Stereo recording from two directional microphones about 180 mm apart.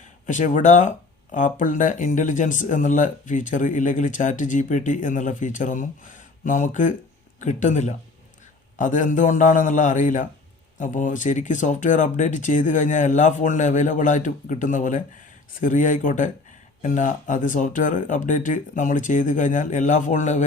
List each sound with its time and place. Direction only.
0.3 s speech: 45° left (ahead or behind)